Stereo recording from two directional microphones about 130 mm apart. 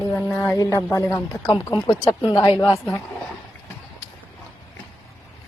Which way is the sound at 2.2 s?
35° left (ahead or behind).